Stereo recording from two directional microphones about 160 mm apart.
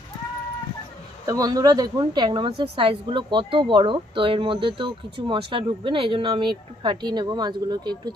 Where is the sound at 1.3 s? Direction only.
25° right (ahead or behind).